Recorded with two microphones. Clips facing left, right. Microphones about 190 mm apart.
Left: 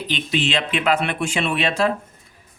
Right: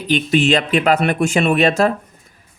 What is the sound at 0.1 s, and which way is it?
A man's voice, 45° right (ahead or behind).